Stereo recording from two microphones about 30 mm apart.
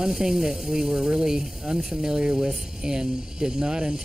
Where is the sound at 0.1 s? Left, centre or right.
Centre.